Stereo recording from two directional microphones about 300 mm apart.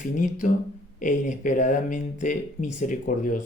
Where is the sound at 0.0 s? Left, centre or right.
Left.